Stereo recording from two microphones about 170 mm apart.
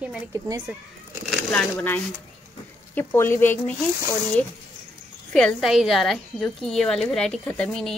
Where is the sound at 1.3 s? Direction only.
5° left (ahead or behind).